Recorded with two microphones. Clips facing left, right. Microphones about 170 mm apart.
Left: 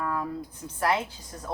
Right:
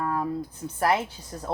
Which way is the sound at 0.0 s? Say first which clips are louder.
Right 2 dB; 30° right (ahead or behind).